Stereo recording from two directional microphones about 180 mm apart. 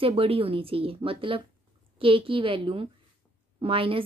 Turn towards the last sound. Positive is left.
turn(degrees=-30)  # may be behind; listen again after turning